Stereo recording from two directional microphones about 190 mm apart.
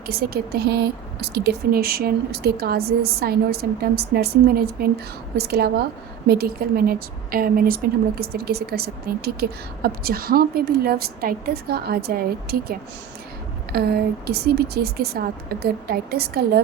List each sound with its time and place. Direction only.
0.1 s speech: 55° right (ahead or behind)
13.7 s speech: 55° right (ahead or behind)